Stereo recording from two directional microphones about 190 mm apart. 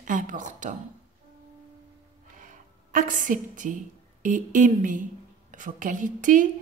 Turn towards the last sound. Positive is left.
turn(degrees=-45)  # may be behind; listen again after turning